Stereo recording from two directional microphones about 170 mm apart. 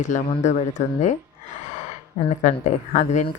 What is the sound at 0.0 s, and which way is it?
Speech, 45° left (ahead or behind).